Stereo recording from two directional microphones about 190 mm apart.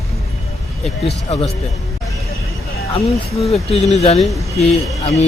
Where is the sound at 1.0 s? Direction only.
30° left (ahead or behind).